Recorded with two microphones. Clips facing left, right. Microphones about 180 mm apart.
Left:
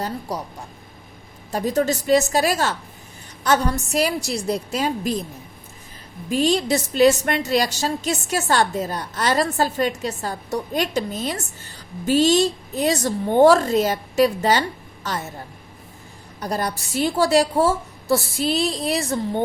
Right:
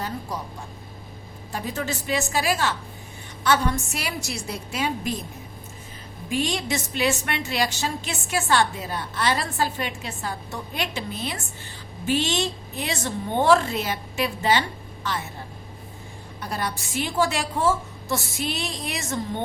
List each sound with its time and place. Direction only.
0.3 s a woman's voice: 35° left (ahead or behind)
1.5 s a woman's voice: 40° left (ahead or behind)
6.2 s a woman's voice: 35° left (ahead or behind)
16.4 s a woman's voice: 40° left (ahead or behind)